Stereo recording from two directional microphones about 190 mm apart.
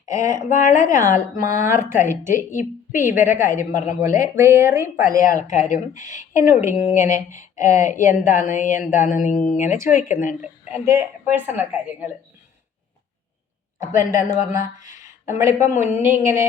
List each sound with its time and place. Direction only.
0.1 s a woman's voice: 15° right (ahead or behind)
3.7 s speech: 40° left (ahead or behind)
4.1 s a woman's voice: 15° right (ahead or behind)
5.1 s speech: 45° left (ahead or behind)
6.0 s a woman's voice: 15° right (ahead or behind)
6.7 s speech: 35° left (ahead or behind)
10.8 s a woman's voice: 10° right (ahead or behind)
14.0 s a woman's voice: 15° right (ahead or behind)
14.9 s a sound: 15° right (ahead or behind)
15.8 s a woman's voice: 10° right (ahead or behind)